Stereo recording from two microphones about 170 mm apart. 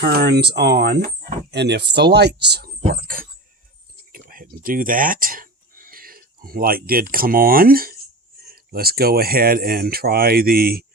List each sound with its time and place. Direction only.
0.0 s speech: 65° right (ahead or behind)
3.0 s speech: 55° right (ahead or behind)
4.1 s a sound: 55° right (ahead or behind)
8.4 s speech: 60° right (ahead or behind)